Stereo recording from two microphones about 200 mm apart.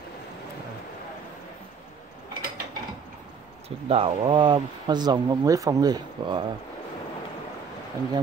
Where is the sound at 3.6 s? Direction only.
30° right (ahead or behind).